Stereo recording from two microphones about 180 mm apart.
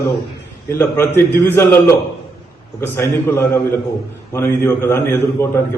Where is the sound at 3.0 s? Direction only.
15° left (ahead or behind).